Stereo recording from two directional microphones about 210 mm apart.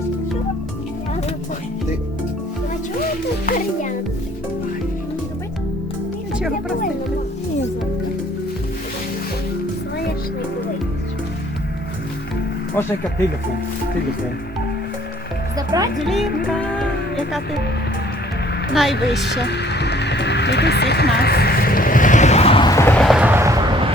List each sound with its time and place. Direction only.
15.5 s speech: 15° right (ahead or behind)
16.2 s music: 50° left (ahead or behind)
16.5 s music: 5° left (ahead or behind)
18.7 s a woman's voice: centre (ahead or behind)
19.2 s music: 55° left (ahead or behind); by 23.9 s 15° right (ahead or behind)